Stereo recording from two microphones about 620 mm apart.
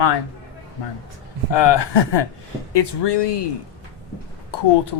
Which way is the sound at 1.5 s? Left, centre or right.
Left.